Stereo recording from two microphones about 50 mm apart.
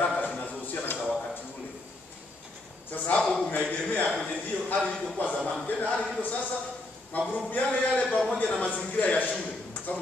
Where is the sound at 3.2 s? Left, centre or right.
Centre.